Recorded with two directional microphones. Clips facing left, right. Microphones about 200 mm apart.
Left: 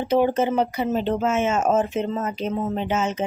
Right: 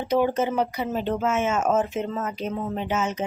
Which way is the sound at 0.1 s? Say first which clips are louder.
Left 2 dB; 30° left (ahead or behind).